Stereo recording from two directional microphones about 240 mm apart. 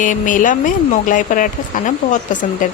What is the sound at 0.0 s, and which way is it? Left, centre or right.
A woman's voice, left.